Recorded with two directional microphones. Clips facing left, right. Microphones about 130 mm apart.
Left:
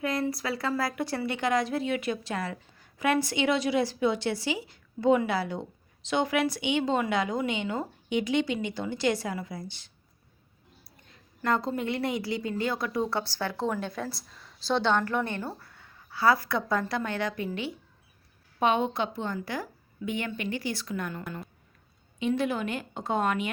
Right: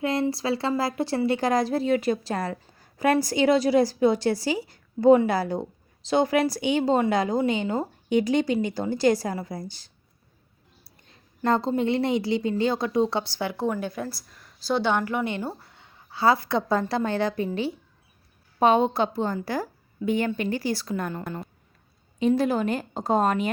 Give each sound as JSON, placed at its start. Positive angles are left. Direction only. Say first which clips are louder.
{"t": 0.0, "sound": "a woman's voice", "louder": "right 4 dB", "side_deg": -30}
{"t": 11.4, "sound": "a woman's voice", "louder": "right 5 dB", "side_deg": -25}